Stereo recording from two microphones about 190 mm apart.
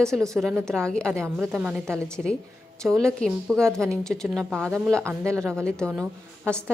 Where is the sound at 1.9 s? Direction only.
5° left (ahead or behind).